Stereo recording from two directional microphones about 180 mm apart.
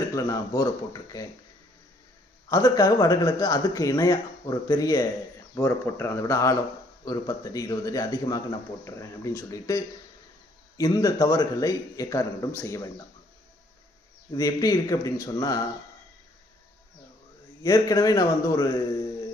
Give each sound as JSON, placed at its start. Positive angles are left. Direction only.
{"t": 0.1, "sound": "a man's voice", "side_deg": 20}
{"t": 2.5, "sound": "a man's voice", "side_deg": 20}
{"t": 14.3, "sound": "a man's voice", "side_deg": 20}
{"t": 17.6, "sound": "a man's voice", "side_deg": 20}